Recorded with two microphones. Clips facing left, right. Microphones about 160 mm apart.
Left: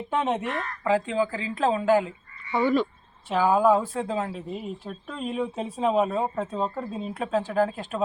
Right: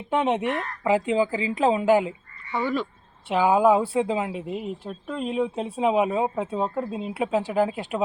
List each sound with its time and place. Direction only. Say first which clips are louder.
0.1 s speech: right 4 dB; 15° right (ahead or behind)
3.2 s speech: right 2 dB; 15° right (ahead or behind)